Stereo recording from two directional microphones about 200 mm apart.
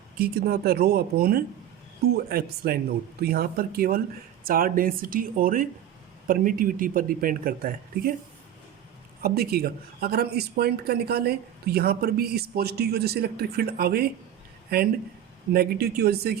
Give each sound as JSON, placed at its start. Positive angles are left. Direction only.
{"t": 0.2, "sound": "speech", "side_deg": -50}
{"t": 9.2, "sound": "speech", "side_deg": -50}